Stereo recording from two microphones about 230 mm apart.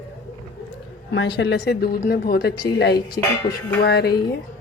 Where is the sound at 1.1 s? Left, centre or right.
Left.